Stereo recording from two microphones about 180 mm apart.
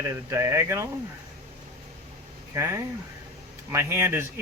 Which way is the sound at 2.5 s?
15° right (ahead or behind).